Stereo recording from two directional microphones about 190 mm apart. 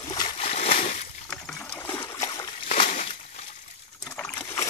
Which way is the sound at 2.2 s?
20° left (ahead or behind).